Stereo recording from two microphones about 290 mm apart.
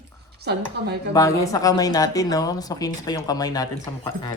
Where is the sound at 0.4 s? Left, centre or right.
Right.